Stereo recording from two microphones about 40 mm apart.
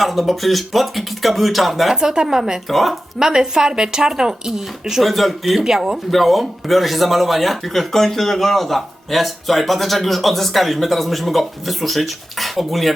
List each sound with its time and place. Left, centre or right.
0.0 s speech: centre
2.0 s speech: centre
2.6 s speech: centre
3.2 s speech: centre
5.0 s speech: centre
5.6 s speech: centre
6.1 s speech: centre